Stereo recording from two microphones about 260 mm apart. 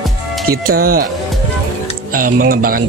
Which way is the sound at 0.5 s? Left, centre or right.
Right.